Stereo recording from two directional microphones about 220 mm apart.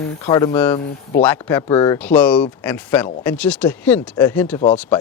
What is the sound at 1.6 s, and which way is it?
Speech, 20° left (ahead or behind).